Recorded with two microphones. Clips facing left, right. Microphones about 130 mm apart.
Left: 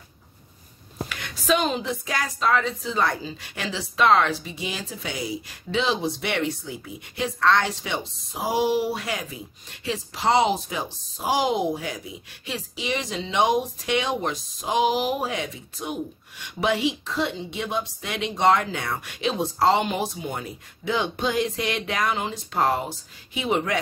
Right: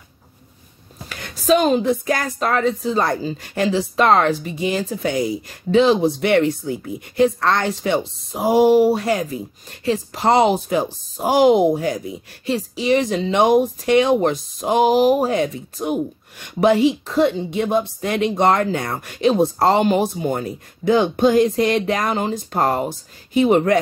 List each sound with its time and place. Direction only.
1.0 s a woman's voice: 40° right (ahead or behind)